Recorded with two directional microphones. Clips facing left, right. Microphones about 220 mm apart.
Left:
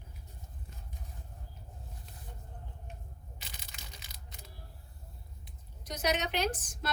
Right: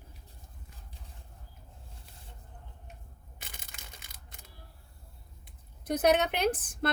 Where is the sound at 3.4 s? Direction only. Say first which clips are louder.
Right 3 dB; 50° right (ahead or behind).